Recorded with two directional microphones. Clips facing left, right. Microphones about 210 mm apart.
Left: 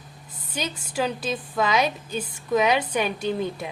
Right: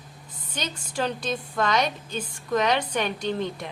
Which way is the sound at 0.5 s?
10° left (ahead or behind).